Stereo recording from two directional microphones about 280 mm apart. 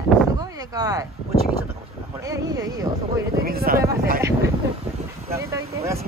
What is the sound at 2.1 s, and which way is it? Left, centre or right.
Speech, centre.